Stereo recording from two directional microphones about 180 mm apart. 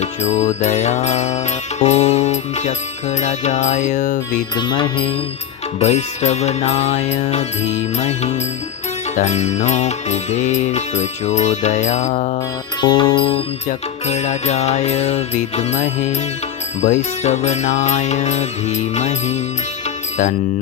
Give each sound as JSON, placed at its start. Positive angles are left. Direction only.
{"t": 0.0, "sound": "music", "side_deg": 40}
{"t": 4.5, "sound": "music", "side_deg": 25}
{"t": 5.8, "sound": "music", "side_deg": 35}
{"t": 12.8, "sound": "music", "side_deg": 25}
{"t": 13.7, "sound": "music", "side_deg": 40}